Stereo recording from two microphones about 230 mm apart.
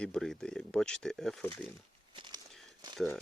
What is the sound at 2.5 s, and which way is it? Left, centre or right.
Crumpling, centre.